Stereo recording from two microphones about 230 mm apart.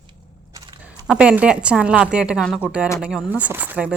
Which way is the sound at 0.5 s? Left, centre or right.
Centre.